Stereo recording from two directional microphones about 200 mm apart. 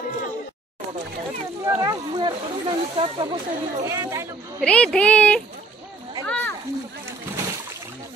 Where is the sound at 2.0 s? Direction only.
25° right (ahead or behind).